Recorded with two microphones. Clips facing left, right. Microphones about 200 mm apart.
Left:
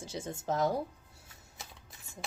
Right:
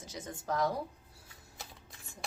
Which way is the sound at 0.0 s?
30° left (ahead or behind).